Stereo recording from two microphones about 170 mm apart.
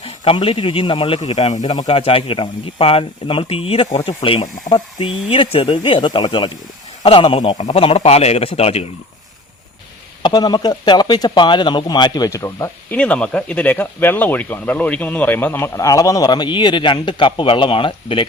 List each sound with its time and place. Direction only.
0.0 s speech: 30° left (ahead or behind)
1.5 s speech: 25° left (ahead or behind)
10.2 s speech: 25° left (ahead or behind)